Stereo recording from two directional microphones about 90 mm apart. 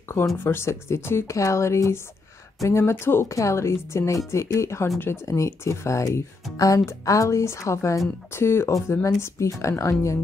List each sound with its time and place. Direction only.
0.4 s speech: 25° left (ahead or behind)